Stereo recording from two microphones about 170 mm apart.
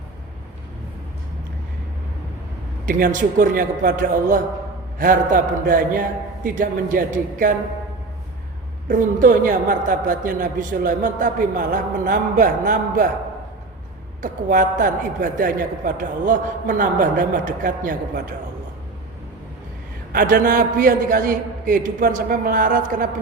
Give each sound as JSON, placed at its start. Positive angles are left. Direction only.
{"t": 2.8, "sound": "a man's voice", "side_deg": -50}
{"t": 8.9, "sound": "a man's voice", "side_deg": -50}
{"t": 14.2, "sound": "a man's voice", "side_deg": -50}
{"t": 20.1, "sound": "a man's voice", "side_deg": -55}